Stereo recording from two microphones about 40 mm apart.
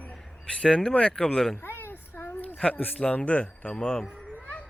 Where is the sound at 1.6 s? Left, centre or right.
Left.